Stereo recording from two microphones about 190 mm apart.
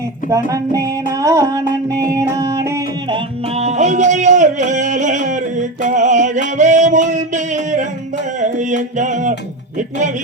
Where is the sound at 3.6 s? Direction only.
35° right (ahead or behind).